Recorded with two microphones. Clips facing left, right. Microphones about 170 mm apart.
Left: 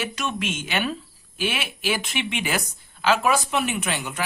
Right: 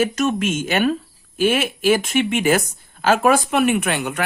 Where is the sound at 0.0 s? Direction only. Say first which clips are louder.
Right 9 dB; 45° right (ahead or behind).